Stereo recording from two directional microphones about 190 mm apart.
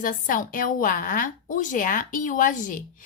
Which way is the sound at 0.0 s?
45° left (ahead or behind).